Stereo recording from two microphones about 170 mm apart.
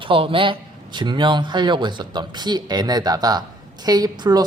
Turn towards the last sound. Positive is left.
turn(degrees=-25)  # may be behind; listen again after turning